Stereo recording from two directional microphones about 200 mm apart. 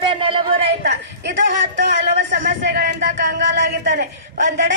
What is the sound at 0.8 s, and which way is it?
Speech, 60° right (ahead or behind).